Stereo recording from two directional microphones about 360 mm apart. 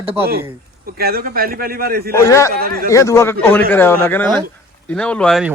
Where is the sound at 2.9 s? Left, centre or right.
Centre.